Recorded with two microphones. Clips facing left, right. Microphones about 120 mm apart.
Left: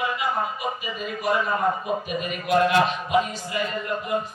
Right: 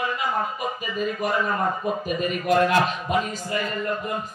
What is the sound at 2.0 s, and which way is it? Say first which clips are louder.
Speech: right 4 dB; 40° right (ahead or behind).